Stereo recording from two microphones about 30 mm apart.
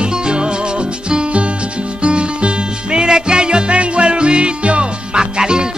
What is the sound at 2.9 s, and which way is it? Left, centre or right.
Music, right.